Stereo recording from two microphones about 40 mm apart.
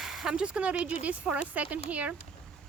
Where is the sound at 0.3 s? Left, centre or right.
Right.